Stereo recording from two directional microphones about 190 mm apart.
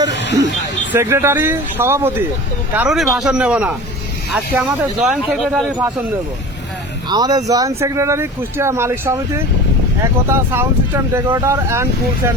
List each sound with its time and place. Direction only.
0.1 s vehicle: 65° left (ahead or behind)
0.9 s speech: 15° right (ahead or behind)
7.1 s speech: 20° right (ahead or behind)